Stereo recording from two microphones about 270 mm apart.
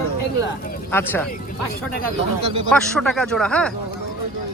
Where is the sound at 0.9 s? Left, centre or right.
Centre.